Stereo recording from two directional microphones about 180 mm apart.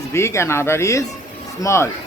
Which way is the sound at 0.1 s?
15° left (ahead or behind).